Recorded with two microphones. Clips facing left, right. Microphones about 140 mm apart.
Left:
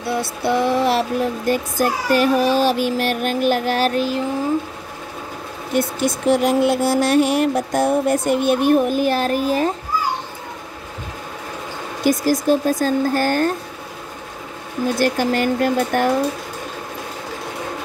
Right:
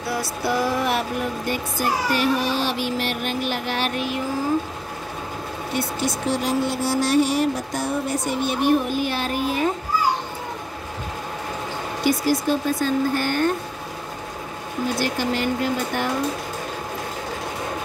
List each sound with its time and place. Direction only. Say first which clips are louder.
0.0 s speech: left 4 dB; 25° left (ahead or behind)
6.3 s music: left 9 dB; 55° left (ahead or behind); by 9.7 s 40° left (ahead or behind)
12.0 s speech: left 3 dB; 45° left (ahead or behind)
15.0 s speech: left 7 dB; 50° left (ahead or behind)